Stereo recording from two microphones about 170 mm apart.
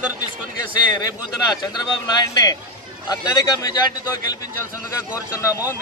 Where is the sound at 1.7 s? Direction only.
25° left (ahead or behind).